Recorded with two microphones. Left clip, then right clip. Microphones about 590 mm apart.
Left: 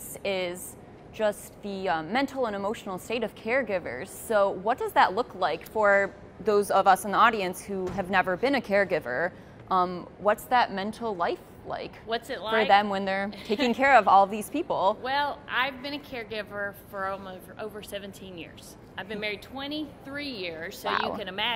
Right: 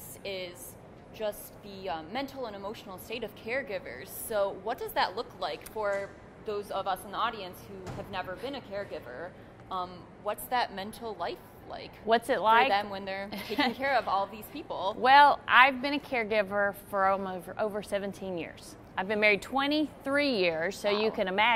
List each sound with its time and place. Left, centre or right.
0.2 s a woman's voice: left
12.1 s a woman's voice: right
12.6 s a woman's voice: left
15.0 s a woman's voice: right